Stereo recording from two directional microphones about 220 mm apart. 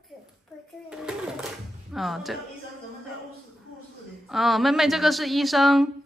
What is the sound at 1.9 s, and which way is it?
Speech, centre (ahead or behind).